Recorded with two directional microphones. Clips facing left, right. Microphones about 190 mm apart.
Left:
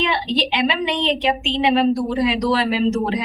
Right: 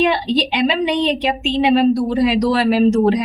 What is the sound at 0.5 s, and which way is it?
A woman's voice, 40° right (ahead or behind).